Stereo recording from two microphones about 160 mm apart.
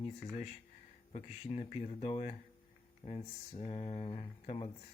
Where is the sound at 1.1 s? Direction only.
40° left (ahead or behind).